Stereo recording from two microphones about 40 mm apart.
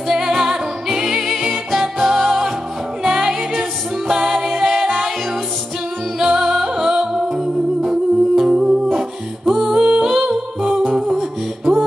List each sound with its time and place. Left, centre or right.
0.1 s music: centre
6.1 s music: centre
9.5 s a capella: centre
10.1 s humming: centre